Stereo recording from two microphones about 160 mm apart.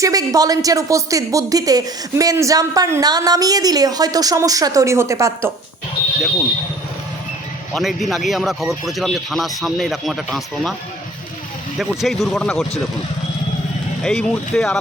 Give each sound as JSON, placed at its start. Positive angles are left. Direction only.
{"t": 0.0, "sound": "a woman's voice", "side_deg": -20}
{"t": 7.7, "sound": "speech", "side_deg": 0}
{"t": 11.8, "sound": "speech", "side_deg": 0}
{"t": 14.0, "sound": "speech", "side_deg": 5}